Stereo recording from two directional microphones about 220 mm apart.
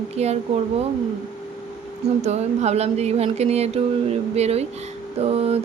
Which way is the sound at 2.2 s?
30° right (ahead or behind).